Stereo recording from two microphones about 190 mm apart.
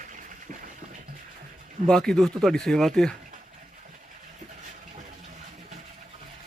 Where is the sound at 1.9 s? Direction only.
5° left (ahead or behind).